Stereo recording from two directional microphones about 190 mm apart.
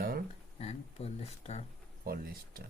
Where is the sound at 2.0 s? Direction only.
50° right (ahead or behind).